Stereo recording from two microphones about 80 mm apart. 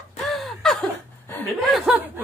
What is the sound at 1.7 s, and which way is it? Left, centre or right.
Chuckle, centre.